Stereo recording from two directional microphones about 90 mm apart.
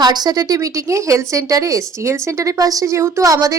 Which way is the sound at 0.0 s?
50° right (ahead or behind).